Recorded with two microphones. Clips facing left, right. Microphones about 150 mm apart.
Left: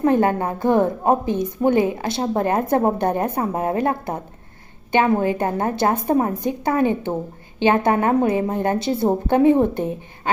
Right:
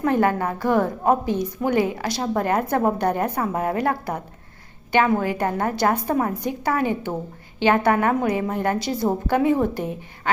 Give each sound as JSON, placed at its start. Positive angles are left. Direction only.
{"t": 0.0, "sound": "a woman's voice", "side_deg": 25}